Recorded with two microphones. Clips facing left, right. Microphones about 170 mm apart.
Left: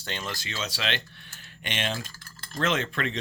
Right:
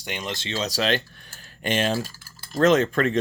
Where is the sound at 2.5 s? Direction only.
40° right (ahead or behind).